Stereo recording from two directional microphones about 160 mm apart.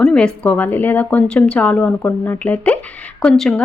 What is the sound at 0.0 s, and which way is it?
Speech, 5° left (ahead or behind).